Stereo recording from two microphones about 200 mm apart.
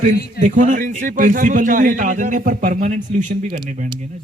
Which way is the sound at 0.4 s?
40° right (ahead or behind).